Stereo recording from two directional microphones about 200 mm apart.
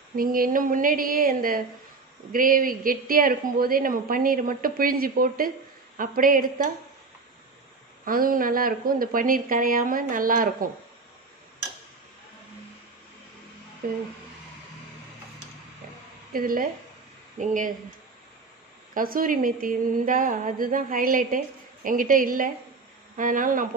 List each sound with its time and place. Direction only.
0.1 s a woman's voice: 45° right (ahead or behind)
8.0 s a woman's voice: 45° right (ahead or behind)
13.8 s a woman's voice: 45° right (ahead or behind)
16.3 s a woman's voice: 45° right (ahead or behind)
18.9 s a woman's voice: 45° right (ahead or behind)